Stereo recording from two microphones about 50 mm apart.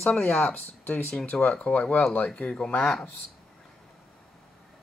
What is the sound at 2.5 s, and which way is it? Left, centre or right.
Speech, centre.